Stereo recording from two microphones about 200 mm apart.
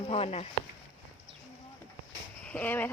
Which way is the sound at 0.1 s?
30° left (ahead or behind).